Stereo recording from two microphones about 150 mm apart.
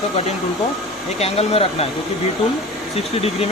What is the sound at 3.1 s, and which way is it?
Speech, 40° left (ahead or behind).